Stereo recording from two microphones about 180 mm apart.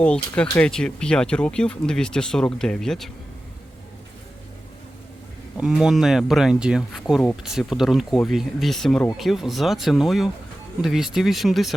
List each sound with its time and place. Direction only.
0.0 s speech: 5° left (ahead or behind)
5.5 s speech: 5° right (ahead or behind)